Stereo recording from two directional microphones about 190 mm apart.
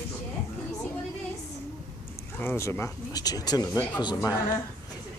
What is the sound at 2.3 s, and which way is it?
Speech, 15° left (ahead or behind).